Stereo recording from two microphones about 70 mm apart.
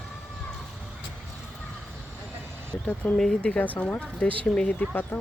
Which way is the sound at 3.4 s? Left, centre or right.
Left.